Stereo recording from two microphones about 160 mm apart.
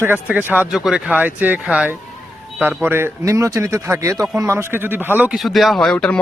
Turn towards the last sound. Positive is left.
turn(degrees=5)  # may be behind; listen again after turning